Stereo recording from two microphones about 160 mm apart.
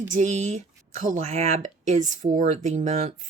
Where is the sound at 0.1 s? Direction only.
50° right (ahead or behind).